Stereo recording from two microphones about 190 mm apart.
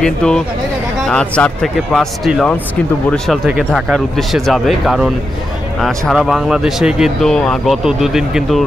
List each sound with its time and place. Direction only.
0.0 s speech: 5° left (ahead or behind)